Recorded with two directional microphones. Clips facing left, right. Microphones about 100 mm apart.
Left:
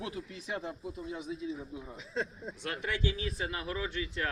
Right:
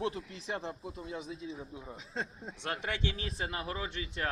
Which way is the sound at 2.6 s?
25° right (ahead or behind).